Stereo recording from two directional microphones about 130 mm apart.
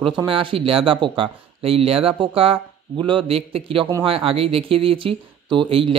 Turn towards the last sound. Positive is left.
turn(degrees=-40)  # may be behind; listen again after turning